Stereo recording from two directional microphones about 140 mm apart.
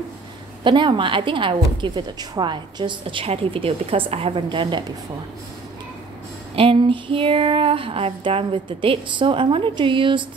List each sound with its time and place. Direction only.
0.7 s a woman's voice: 35° right (ahead or behind)
6.5 s a woman's voice: 40° right (ahead or behind)